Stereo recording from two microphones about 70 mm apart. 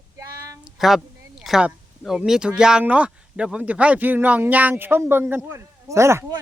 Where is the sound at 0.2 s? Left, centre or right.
Right.